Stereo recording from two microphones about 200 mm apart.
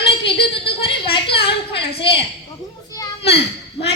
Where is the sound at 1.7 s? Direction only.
30° left (ahead or behind).